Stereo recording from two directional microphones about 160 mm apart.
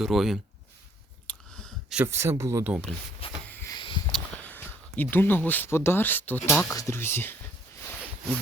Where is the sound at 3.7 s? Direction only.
30° left (ahead or behind).